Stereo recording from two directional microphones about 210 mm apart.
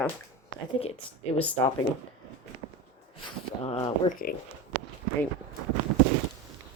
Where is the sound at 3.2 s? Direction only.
25° left (ahead or behind).